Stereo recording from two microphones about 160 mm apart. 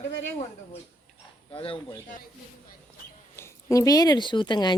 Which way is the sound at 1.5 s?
35° left (ahead or behind).